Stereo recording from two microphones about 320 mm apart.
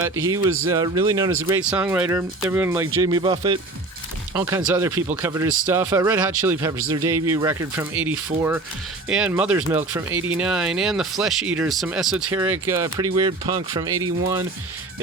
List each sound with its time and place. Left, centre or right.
0.0 s speech: centre